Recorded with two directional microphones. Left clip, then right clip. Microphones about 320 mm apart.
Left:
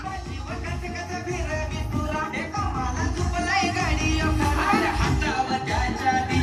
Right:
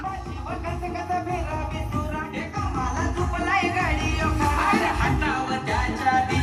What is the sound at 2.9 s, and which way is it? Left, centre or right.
Music, centre.